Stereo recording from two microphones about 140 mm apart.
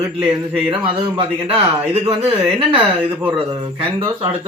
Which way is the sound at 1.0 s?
40° right (ahead or behind).